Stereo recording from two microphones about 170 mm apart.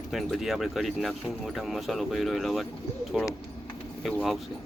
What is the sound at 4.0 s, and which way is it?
Speech, centre (ahead or behind).